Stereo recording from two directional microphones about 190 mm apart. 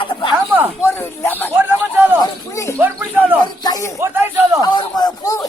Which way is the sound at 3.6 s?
20° left (ahead or behind).